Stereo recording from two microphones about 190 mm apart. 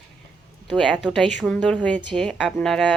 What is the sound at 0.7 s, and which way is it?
Speech, centre (ahead or behind).